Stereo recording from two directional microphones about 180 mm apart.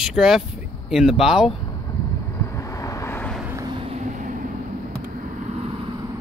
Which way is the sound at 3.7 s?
35° right (ahead or behind).